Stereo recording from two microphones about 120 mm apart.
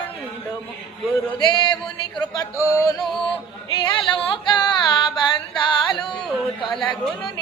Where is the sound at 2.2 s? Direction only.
30° left (ahead or behind).